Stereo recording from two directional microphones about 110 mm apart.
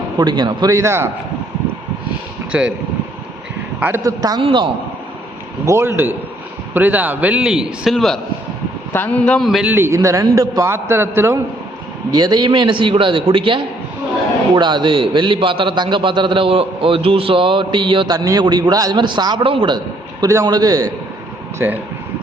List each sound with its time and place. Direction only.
0.2 s a man's voice: 40° right (ahead or behind); by 1.1 s 25° right (ahead or behind)
2.5 s a man's voice: 10° right (ahead or behind)
3.8 s speech: 20° right (ahead or behind)
4.0 s a man's voice: 35° right (ahead or behind)
4.4 s a man's voice: 50° right (ahead or behind)
5.6 s a man's voice: 25° right (ahead or behind); by 8.2 s 5° left (ahead or behind)
8.9 s a man's voice: 15° left (ahead or behind)
9.7 s a man's voice: 25° right (ahead or behind)
12.1 s a man's voice: 40° right (ahead or behind)
20.2 s a man's voice: 30° right (ahead or behind)
21.6 s a man's voice: 20° right (ahead or behind)